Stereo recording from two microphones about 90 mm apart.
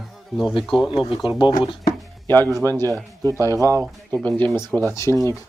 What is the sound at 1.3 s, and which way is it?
Speech, 60° left (ahead or behind).